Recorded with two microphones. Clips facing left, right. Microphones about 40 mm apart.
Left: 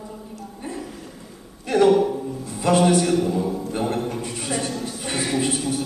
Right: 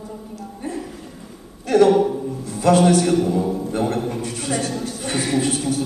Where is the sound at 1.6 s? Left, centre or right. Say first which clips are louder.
Right 3 dB; centre.